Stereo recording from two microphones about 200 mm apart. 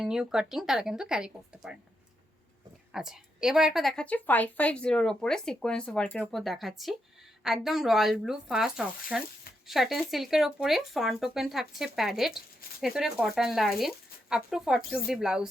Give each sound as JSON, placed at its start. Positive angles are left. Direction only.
{"t": 0.0, "sound": "a woman's voice", "side_deg": -5}
{"t": 2.9, "sound": "a woman's voice", "side_deg": 0}